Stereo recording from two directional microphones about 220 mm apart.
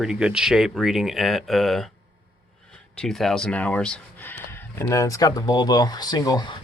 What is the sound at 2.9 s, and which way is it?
Speech, centre (ahead or behind).